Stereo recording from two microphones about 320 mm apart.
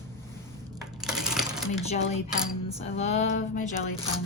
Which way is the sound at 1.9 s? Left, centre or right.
Centre.